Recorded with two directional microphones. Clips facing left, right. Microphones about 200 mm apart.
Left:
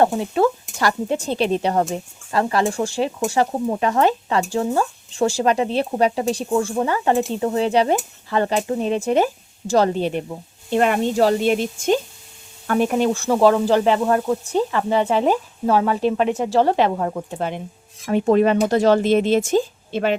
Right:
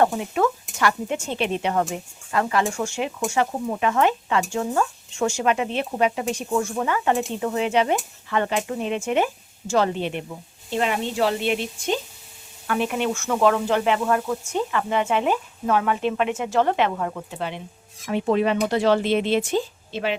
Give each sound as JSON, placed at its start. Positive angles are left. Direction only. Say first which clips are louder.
{"t": 0.0, "sound": "speech", "louder": "left 3 dB", "side_deg": 30}
{"t": 10.7, "sound": "speech", "louder": "left 6 dB", "side_deg": 55}